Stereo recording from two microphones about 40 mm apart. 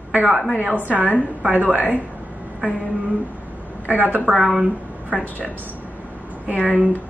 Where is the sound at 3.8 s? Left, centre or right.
Right.